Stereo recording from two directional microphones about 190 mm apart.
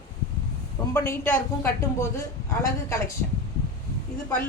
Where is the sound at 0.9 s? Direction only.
10° left (ahead or behind).